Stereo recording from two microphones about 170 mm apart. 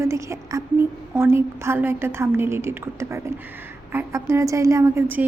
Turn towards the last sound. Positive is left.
turn(degrees=-15)  # may be behind; listen again after turning